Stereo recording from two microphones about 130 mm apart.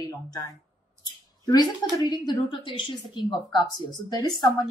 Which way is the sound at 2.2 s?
35° left (ahead or behind).